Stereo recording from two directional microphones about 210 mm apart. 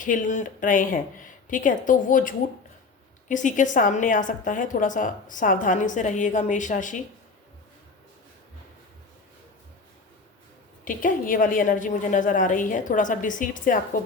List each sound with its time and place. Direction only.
0.0 s a woman's voice: 35° left (ahead or behind)
10.8 s a woman's voice: 40° left (ahead or behind)